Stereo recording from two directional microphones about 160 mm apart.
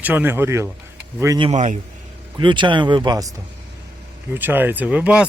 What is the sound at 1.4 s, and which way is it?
Speech, 45° right (ahead or behind).